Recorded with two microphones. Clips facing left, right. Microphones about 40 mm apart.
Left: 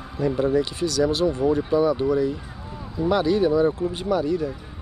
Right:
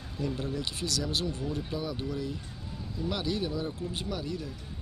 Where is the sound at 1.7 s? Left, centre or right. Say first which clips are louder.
Left 15 dB; centre.